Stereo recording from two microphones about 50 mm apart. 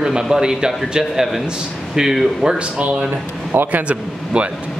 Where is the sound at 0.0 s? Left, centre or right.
Centre.